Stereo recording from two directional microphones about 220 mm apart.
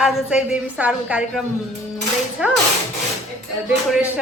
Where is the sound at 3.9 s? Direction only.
5° right (ahead or behind).